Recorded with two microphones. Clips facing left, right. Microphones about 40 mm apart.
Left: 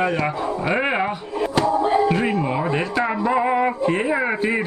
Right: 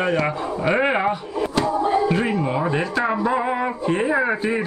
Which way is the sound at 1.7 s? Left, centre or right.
Left.